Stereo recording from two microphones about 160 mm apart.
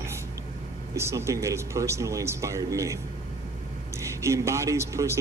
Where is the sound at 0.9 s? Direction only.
15° right (ahead or behind).